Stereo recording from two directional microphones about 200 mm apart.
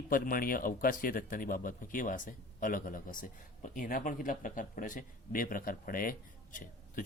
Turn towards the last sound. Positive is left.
turn(degrees=40)  # may be behind; listen again after turning